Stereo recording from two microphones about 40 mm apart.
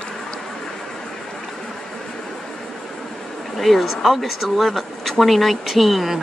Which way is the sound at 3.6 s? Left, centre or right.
Centre.